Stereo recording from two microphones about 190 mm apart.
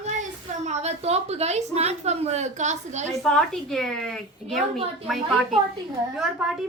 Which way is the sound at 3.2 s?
Centre (ahead or behind).